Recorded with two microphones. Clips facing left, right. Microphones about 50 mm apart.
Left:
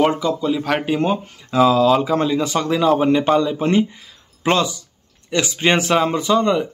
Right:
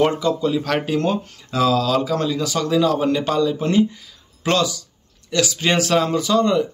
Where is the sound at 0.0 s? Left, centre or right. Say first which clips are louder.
Left 1 dB; centre.